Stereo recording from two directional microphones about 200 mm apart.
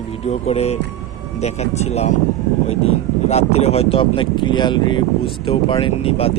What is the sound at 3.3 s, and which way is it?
Speech, 35° left (ahead or behind).